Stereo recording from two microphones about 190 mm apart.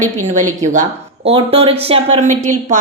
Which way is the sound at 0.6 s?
40° right (ahead or behind).